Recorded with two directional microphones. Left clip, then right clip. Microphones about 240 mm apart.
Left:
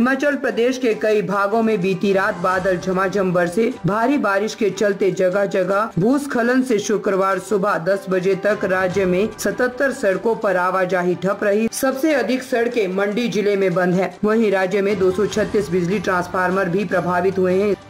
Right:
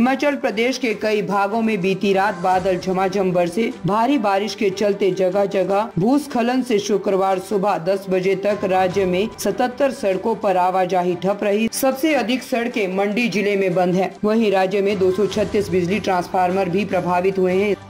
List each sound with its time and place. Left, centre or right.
0.0 s speech: centre
11.6 s speech: centre
13.5 s speech: centre
13.9 s speech: centre
15.9 s speech: centre